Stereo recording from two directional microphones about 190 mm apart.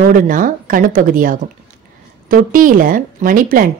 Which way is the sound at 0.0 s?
45° right (ahead or behind).